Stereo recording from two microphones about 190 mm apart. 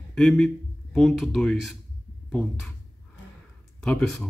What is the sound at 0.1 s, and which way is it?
A man's voice, centre (ahead or behind).